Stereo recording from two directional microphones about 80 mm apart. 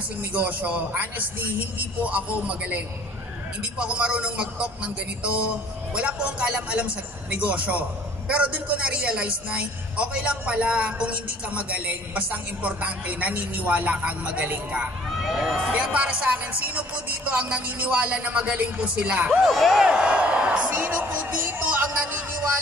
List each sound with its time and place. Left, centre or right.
0.3 s a woman's voice: centre
3.8 s a woman's voice: centre
15.0 s a woman's voice: centre
19.4 s a man's voice: centre
21.5 s music: right